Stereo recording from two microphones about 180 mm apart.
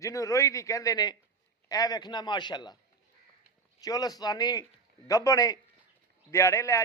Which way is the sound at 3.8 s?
20° left (ahead or behind).